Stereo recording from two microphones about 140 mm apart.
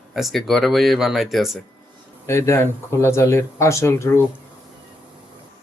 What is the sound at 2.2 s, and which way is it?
Speech, 20° left (ahead or behind).